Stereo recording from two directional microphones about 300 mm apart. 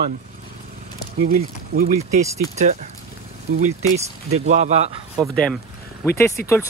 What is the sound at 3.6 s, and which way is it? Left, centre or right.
Speech, right.